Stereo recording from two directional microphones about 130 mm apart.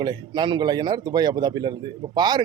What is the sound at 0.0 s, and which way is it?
A man's voice, 35° right (ahead or behind).